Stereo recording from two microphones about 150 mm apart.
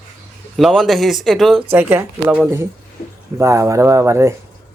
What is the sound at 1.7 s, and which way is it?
Speech, 10° right (ahead or behind).